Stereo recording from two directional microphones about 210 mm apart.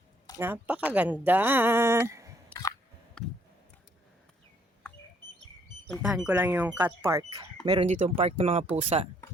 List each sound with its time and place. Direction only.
0.3 s speech: 10° right (ahead or behind)
2.5 s a sound: 5° left (ahead or behind)
5.9 s speech: centre (ahead or behind); by 7.9 s 20° right (ahead or behind)
7.9 s speech: 30° right (ahead or behind)